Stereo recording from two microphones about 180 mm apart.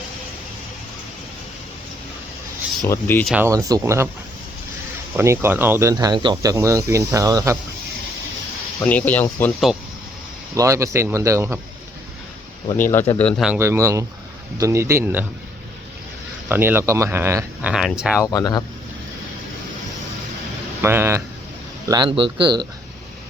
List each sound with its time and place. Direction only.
2.8 s speech: 10° left (ahead or behind)
3.4 s speech: 20° right (ahead or behind)
5.1 s speech: 15° right (ahead or behind)
8.8 s speech: 10° left (ahead or behind)
10.5 s speech: 15° right (ahead or behind)
13.1 s speech: 5° left (ahead or behind)
13.4 s speech: 10° right (ahead or behind)
16.5 s speech: 10° right (ahead or behind)
18.2 s speech: 20° left (ahead or behind)
20.8 s speech: 15° right (ahead or behind)
21.8 s speech: 25° right (ahead or behind)